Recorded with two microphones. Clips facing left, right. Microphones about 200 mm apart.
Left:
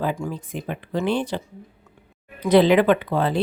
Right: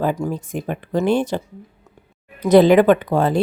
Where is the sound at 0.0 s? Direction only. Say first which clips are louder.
Right 5 dB; 45° right (ahead or behind).